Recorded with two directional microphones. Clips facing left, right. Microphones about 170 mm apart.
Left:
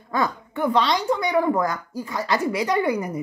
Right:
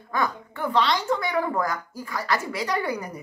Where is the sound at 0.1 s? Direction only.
20° left (ahead or behind).